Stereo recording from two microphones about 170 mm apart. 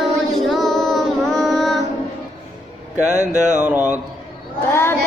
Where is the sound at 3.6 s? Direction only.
10° right (ahead or behind).